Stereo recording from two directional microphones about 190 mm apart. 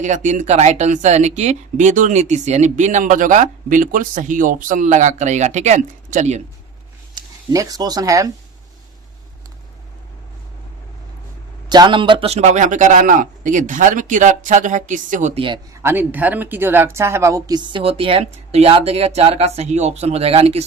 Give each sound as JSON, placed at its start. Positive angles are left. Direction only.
{"t": 0.0, "sound": "speech", "side_deg": -40}
{"t": 7.2, "sound": "speech", "side_deg": -20}
{"t": 11.7, "sound": "speech", "side_deg": -25}
{"t": 15.4, "sound": "a woman's voice", "side_deg": -25}
{"t": 15.8, "sound": "a woman's voice", "side_deg": -10}